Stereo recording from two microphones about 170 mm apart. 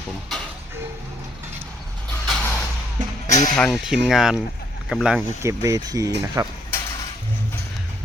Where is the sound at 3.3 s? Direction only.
45° left (ahead or behind).